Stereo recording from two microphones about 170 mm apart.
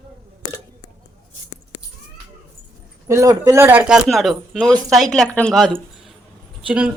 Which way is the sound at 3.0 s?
20° right (ahead or behind).